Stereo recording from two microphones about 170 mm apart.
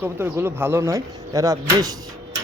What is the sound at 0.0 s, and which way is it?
Speech, 15° right (ahead or behind).